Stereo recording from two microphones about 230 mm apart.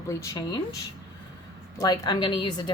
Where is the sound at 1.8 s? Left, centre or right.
Centre.